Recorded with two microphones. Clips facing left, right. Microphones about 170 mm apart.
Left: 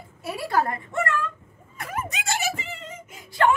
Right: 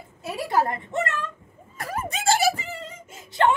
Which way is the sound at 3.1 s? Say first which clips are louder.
Even; 25° right (ahead or behind).